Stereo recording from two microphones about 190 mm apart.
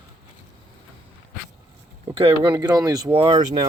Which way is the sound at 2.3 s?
20° right (ahead or behind).